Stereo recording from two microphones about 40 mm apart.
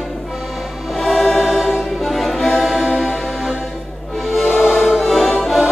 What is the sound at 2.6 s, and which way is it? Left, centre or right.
Music, centre.